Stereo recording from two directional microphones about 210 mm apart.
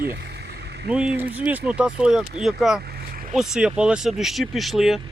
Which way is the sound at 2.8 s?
45° right (ahead or behind).